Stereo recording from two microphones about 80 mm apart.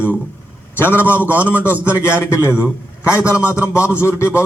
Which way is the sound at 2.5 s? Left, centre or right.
Centre.